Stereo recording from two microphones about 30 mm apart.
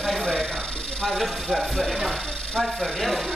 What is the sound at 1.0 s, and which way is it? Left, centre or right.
Speech, centre.